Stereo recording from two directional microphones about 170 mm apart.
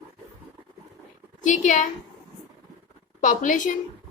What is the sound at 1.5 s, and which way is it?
Speech, 45° left (ahead or behind).